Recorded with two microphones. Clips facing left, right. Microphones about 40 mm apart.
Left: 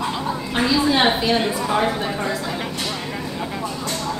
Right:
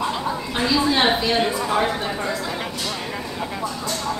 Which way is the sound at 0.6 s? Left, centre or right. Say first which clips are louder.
Left 1 dB; centre.